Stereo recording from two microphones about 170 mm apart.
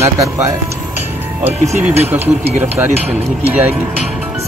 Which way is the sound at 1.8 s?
10° right (ahead or behind).